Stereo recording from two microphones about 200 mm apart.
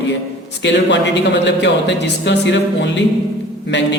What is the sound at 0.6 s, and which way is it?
A man's voice, 60° left (ahead or behind).